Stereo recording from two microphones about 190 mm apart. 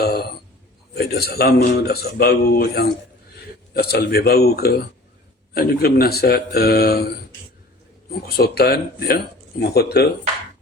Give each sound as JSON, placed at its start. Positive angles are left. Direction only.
{"t": 0.0, "sound": "a sound", "side_deg": 55}
{"t": 0.9, "sound": "a man's voice", "side_deg": 55}
{"t": 8.4, "sound": "a man's voice", "side_deg": 55}